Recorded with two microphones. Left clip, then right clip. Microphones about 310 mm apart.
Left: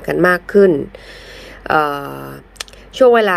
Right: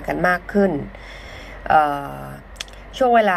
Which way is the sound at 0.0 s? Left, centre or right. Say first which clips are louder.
Left 5 dB; centre.